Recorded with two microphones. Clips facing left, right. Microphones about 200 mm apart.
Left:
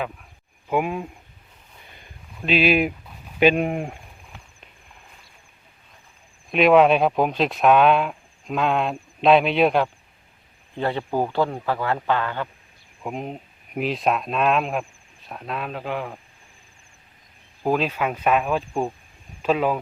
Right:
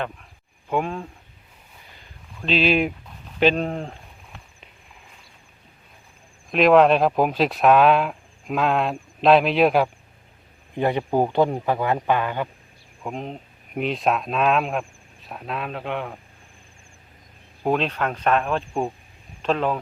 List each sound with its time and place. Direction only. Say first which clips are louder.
0.7 s speech: left 1 dB; 10° left (ahead or behind)
2.4 s speech: left 1 dB; 10° left (ahead or behind)
6.5 s speech: even; centre (ahead or behind)
10.8 s a man's voice: right 3 dB; 15° right (ahead or behind)
13.0 s speech: left 1 dB; 5° left (ahead or behind)
17.6 s speech: even; 5° left (ahead or behind)